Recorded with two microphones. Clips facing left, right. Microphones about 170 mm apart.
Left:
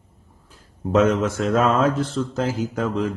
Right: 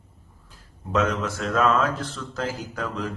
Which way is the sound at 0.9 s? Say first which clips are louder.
Left 6 dB; 40° left (ahead or behind).